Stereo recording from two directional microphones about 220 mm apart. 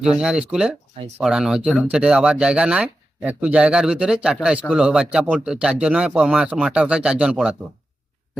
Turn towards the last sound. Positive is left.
turn(degrees=-5)  # may be behind; listen again after turning